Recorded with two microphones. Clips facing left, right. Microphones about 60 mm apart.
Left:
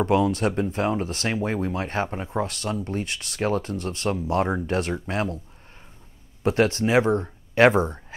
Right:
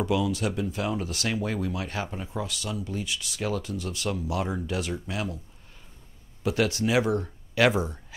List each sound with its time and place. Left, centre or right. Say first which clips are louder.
0.0 s speech: left 5 dB; left
6.4 s speech: left 4 dB; left